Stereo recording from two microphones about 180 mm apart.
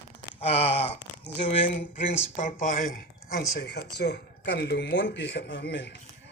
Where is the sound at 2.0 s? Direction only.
50° left (ahead or behind).